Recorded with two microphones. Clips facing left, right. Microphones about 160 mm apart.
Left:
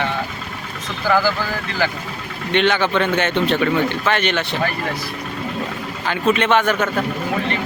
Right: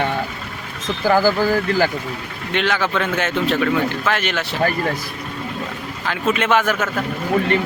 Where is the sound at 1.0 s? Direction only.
45° right (ahead or behind).